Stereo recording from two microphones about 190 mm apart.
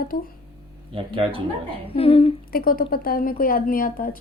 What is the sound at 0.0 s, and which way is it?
Speech, 50° left (ahead or behind).